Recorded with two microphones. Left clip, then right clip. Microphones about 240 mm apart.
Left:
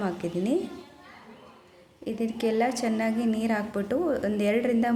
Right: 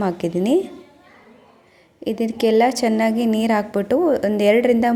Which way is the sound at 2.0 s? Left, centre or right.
Right.